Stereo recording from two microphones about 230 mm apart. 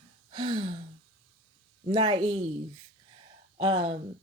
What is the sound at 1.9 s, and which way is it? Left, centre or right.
Speech, right.